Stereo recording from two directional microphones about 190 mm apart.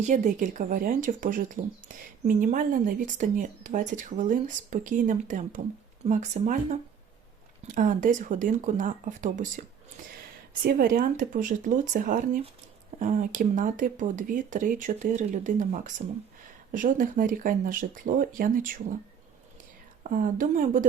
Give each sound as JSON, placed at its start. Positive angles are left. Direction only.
{"t": 0.0, "sound": "speech", "side_deg": -40}
{"t": 20.1, "sound": "speech", "side_deg": -45}